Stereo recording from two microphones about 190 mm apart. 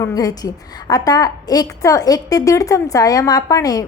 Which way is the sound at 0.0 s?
20° left (ahead or behind).